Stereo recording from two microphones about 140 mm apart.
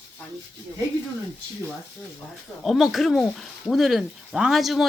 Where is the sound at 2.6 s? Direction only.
Centre (ahead or behind).